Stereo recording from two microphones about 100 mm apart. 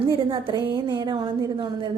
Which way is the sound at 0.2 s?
55° right (ahead or behind).